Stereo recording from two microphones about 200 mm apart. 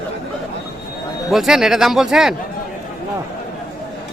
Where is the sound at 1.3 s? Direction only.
Centre (ahead or behind).